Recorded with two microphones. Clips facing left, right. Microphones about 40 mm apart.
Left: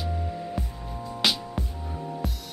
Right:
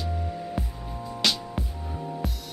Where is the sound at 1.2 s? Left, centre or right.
Centre.